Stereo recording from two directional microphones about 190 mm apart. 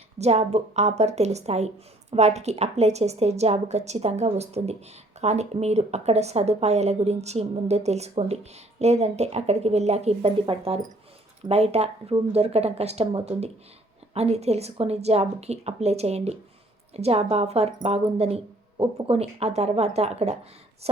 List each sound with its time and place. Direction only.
0.2 s a woman's voice: 35° right (ahead or behind)